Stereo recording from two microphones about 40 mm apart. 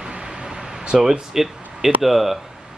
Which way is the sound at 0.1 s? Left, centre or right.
Centre.